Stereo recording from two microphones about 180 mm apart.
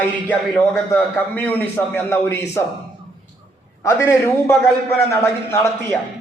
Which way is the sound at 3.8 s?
15° left (ahead or behind).